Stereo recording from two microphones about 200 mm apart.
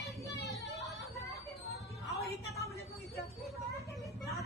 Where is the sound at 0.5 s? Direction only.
Centre (ahead or behind).